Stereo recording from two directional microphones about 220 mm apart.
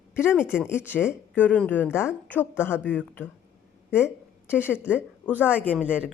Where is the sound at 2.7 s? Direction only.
5° right (ahead or behind).